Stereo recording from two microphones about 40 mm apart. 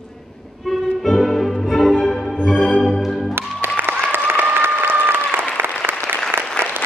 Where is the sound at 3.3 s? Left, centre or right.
Right.